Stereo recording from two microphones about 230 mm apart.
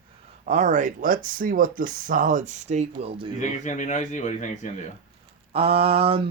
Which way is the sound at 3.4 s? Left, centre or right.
Left.